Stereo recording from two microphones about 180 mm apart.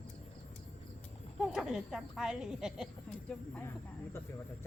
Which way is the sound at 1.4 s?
Centre (ahead or behind).